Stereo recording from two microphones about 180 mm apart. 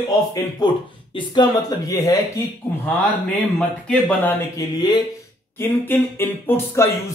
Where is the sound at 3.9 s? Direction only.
10° left (ahead or behind).